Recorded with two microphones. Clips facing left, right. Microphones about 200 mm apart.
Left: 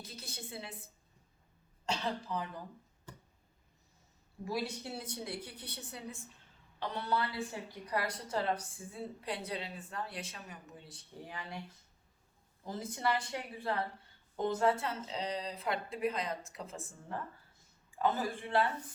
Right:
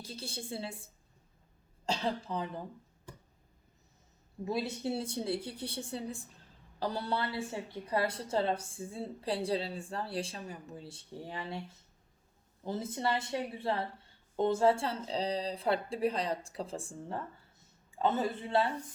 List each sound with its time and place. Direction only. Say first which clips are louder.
0.0 s a woman's voice: right 5 dB; 30° right (ahead or behind)
1.9 s a woman's voice: right 3 dB; 30° right (ahead or behind)
4.4 s a woman's voice: right 4 dB; 25° right (ahead or behind)
12.6 s a woman's voice: right 2 dB; 25° right (ahead or behind)